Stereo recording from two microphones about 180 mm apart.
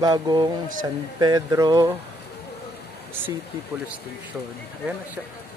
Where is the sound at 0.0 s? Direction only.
20° right (ahead or behind).